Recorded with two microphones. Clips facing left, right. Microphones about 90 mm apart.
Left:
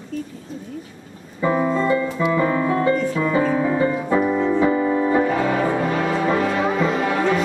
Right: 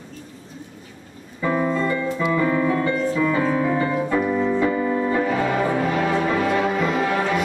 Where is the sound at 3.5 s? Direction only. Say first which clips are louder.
Left 1 dB; 15° left (ahead or behind).